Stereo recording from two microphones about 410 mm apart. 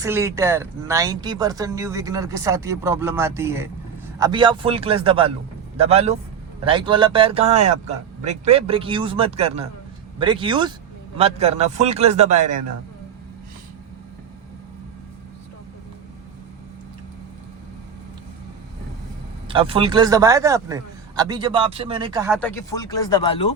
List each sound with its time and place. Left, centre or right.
0.0 s a man's voice: centre
19.5 s speech: centre
22.4 s speech: centre